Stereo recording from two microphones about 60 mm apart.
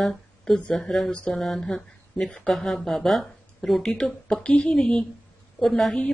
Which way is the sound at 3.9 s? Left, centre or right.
Centre.